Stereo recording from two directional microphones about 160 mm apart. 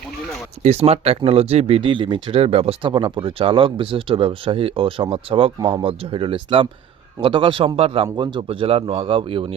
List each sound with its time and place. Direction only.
0.6 s speech: 40° right (ahead or behind)